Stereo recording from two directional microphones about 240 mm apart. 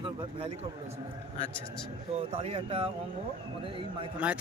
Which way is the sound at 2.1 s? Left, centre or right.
Right.